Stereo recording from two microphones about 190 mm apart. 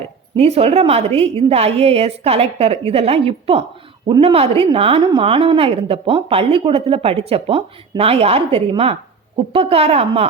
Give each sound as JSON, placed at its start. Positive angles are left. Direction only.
{"t": 0.3, "sound": "a woman's voice", "side_deg": -35}